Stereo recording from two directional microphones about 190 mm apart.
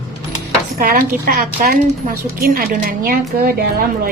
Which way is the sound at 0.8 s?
50° right (ahead or behind).